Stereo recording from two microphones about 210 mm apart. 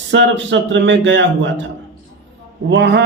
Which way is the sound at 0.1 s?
60° right (ahead or behind).